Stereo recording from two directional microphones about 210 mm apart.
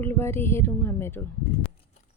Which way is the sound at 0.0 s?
10° left (ahead or behind).